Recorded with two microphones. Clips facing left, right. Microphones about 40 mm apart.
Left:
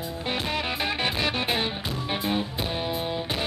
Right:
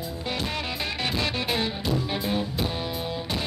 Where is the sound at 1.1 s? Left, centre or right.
Left.